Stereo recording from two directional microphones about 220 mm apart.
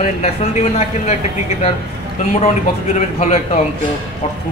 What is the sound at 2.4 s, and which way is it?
A man's voice, 30° left (ahead or behind).